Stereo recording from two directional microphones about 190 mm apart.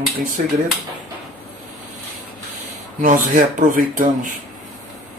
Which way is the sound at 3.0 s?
45° right (ahead or behind).